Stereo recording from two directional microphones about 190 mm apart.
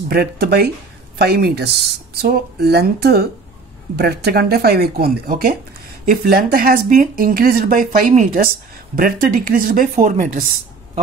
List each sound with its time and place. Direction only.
0.1 s speech: 55° right (ahead or behind)